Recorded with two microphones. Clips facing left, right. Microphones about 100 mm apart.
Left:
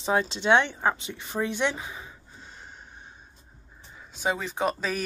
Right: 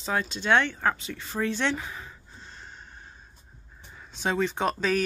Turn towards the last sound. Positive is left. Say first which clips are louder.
# right 2 dB
turn(degrees=5)  # may be behind; listen again after turning